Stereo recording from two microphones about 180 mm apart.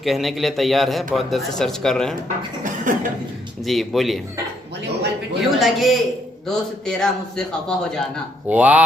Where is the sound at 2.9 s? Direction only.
50° right (ahead or behind).